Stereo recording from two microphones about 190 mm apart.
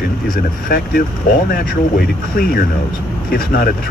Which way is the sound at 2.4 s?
50° left (ahead or behind).